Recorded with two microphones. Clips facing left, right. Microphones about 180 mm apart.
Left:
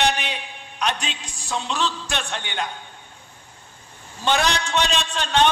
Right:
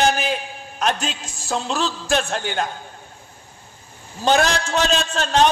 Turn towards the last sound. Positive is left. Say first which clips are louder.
# right 3 dB
turn(degrees=-40)  # may be behind; listen again after turning